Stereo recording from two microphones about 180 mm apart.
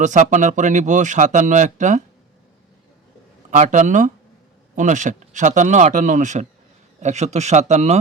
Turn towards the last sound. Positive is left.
turn(degrees=-40)  # may be behind; listen again after turning